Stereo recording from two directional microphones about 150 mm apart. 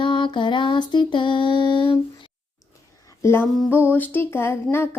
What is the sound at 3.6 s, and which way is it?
Music, 15° left (ahead or behind).